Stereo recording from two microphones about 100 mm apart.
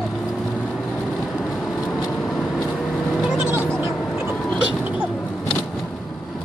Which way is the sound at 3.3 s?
25° right (ahead or behind).